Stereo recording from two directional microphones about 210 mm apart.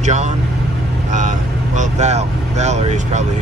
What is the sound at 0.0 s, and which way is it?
Speech, 35° right (ahead or behind).